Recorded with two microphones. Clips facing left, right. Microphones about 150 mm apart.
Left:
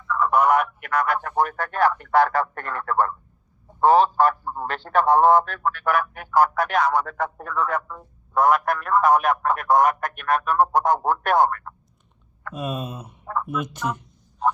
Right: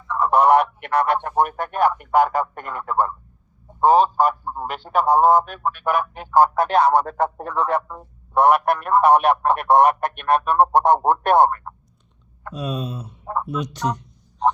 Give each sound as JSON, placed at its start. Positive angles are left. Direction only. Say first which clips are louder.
{"t": 0.1, "sound": "a man's voice", "louder": "right 3 dB", "side_deg": -30}
{"t": 12.9, "sound": "speech", "louder": "right 3 dB", "side_deg": 10}
{"t": 13.2, "sound": "a sound", "louder": "right 1 dB", "side_deg": -20}